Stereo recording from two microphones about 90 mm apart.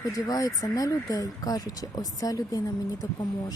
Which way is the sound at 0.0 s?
40° left (ahead or behind).